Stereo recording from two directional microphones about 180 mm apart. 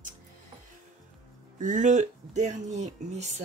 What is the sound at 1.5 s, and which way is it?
Speech, 45° right (ahead or behind).